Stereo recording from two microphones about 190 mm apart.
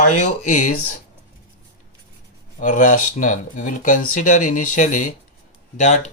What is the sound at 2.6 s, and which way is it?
Speech, 40° left (ahead or behind).